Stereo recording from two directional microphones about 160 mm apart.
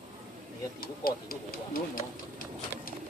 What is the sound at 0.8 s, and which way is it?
A man's voice, 65° left (ahead or behind).